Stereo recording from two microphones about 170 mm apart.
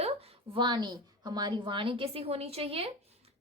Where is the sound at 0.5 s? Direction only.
25° right (ahead or behind).